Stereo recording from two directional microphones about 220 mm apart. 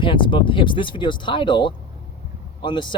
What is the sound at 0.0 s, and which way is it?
Speech, 20° left (ahead or behind).